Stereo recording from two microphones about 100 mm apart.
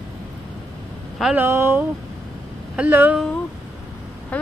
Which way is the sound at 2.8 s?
20° right (ahead or behind).